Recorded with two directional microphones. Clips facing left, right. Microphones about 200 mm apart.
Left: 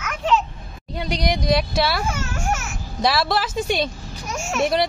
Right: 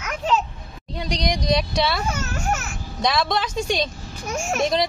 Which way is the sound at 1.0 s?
5° left (ahead or behind).